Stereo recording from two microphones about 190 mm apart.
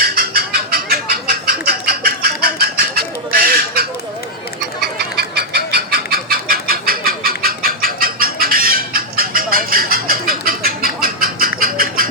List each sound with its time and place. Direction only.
0.0 s bird: 55° right (ahead or behind)
4.8 s chicken: 55° right (ahead or behind)
11.6 s train: 50° right (ahead or behind)